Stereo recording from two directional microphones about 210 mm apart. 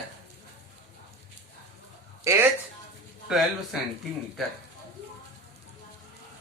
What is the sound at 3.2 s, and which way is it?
Speech, centre (ahead or behind).